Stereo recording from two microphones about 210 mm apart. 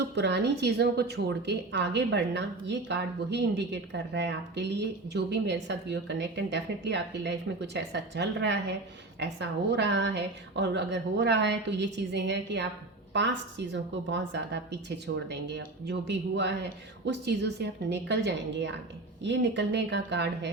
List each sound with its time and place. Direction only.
0.0 s a woman's voice: 55° right (ahead or behind)